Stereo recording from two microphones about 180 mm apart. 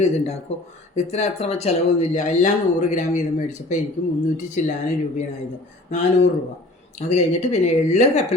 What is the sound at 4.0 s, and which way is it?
Speech, 50° left (ahead or behind).